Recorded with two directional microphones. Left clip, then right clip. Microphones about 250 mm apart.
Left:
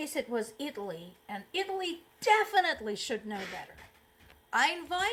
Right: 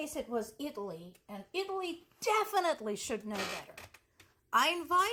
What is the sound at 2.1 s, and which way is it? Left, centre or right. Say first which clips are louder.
A woman's voice: left 5 dB; right.